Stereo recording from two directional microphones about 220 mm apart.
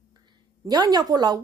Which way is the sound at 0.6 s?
20° right (ahead or behind).